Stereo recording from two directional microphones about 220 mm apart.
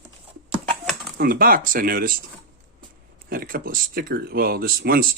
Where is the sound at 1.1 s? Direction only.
40° right (ahead or behind).